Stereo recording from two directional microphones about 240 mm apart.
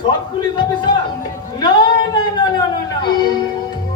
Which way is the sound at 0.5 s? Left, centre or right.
Centre.